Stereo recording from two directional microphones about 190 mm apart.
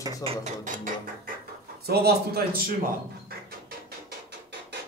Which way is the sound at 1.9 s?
55° right (ahead or behind).